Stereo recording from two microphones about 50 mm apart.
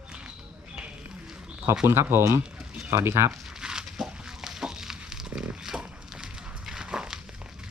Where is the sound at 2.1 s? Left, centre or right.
Right.